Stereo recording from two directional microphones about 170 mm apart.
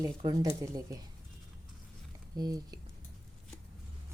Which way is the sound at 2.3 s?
25° right (ahead or behind).